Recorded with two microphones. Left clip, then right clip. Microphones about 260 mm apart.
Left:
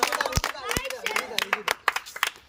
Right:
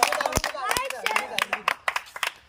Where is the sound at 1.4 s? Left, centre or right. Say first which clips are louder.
Right 2 dB; left.